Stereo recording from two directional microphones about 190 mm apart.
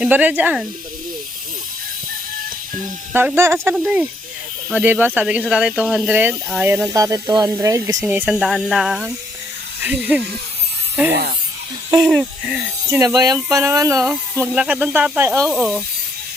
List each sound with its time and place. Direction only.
0.0 s speech: 10° right (ahead or behind)
3.1 s speech: 10° right (ahead or behind)
8.2 s speech: centre (ahead or behind)
11.1 s speech: 55° right (ahead or behind)
11.9 s speech: centre (ahead or behind)
12.9 s speech: 15° right (ahead or behind)
14.5 s speech: 5° right (ahead or behind)
15.4 s speech: centre (ahead or behind)